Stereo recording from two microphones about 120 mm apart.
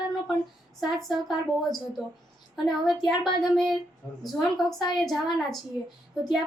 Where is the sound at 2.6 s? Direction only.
Centre (ahead or behind).